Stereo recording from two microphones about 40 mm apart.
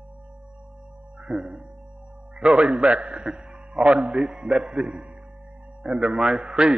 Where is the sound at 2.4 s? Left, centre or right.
Right.